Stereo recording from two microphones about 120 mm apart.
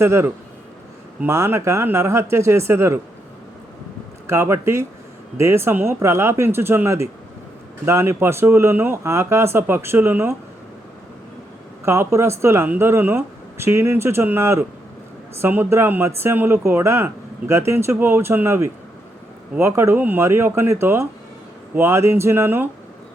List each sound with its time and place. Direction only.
0.0 s speech: 20° right (ahead or behind)
4.3 s speech: 20° right (ahead or behind)
11.9 s speech: 20° right (ahead or behind)